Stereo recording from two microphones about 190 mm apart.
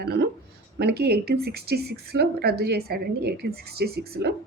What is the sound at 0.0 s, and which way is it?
A woman's voice, 60° right (ahead or behind).